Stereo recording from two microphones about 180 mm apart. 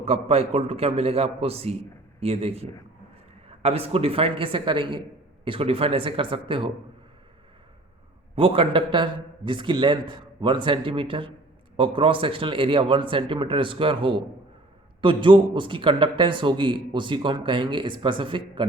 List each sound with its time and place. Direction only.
0.0 s a man's voice: 35° right (ahead or behind)
8.4 s a man's voice: 30° right (ahead or behind)